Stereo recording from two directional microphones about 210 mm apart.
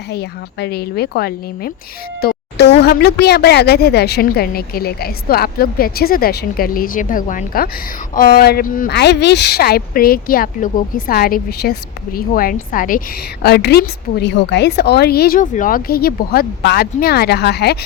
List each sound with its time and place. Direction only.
0.1 s speech: 50° left (ahead or behind)